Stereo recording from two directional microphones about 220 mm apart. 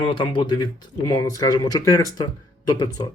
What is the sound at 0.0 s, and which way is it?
Speech, 20° left (ahead or behind).